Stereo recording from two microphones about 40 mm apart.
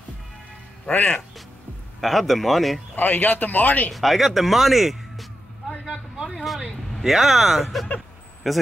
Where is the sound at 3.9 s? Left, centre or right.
Centre.